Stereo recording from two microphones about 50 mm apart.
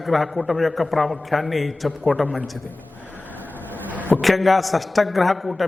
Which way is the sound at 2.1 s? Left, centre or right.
Centre.